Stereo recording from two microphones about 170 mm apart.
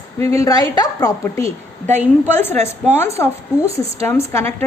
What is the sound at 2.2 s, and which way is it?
Speech, 10° left (ahead or behind).